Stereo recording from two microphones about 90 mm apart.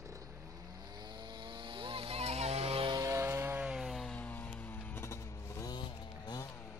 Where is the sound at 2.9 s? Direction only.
35° right (ahead or behind).